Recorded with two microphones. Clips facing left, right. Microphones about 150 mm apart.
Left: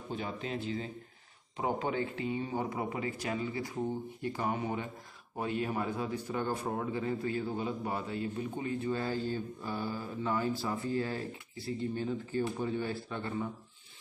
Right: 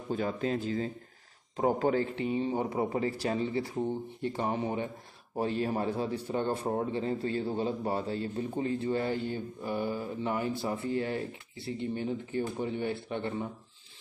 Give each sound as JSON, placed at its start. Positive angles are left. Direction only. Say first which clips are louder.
{"t": 0.1, "sound": "speech", "louder": "right 7 dB", "side_deg": -45}
{"t": 2.1, "sound": "a man's voice", "louder": "right 4 dB", "side_deg": -25}